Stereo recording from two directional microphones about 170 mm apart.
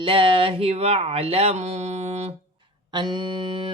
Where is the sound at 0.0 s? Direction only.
30° right (ahead or behind).